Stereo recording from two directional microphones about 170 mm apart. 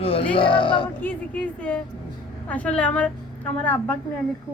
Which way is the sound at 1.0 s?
10° left (ahead or behind).